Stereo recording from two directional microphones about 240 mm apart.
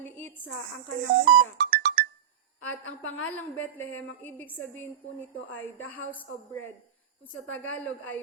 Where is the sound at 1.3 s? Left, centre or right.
Right.